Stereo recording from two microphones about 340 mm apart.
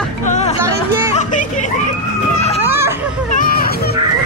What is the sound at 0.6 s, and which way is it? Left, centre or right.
Music, centre.